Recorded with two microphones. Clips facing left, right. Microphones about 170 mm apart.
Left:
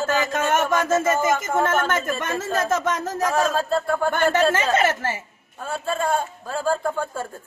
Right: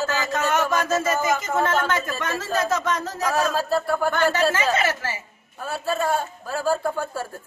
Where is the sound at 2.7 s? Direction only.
50° left (ahead or behind).